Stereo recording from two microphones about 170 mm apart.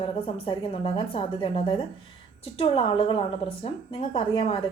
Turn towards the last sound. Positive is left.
turn(degrees=35)  # may be behind; listen again after turning